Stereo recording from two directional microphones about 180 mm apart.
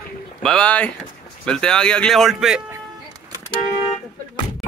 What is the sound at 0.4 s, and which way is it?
Speech, 5° left (ahead or behind).